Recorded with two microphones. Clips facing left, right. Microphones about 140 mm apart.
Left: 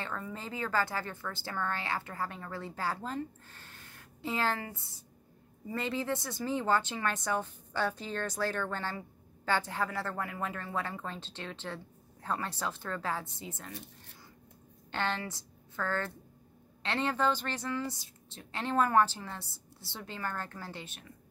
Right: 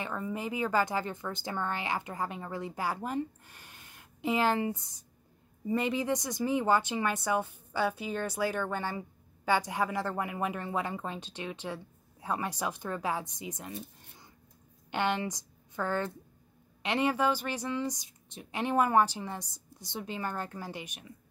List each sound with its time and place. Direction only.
0.0 s a woman's voice: 15° right (ahead or behind)
14.9 s a woman's voice: 15° right (ahead or behind)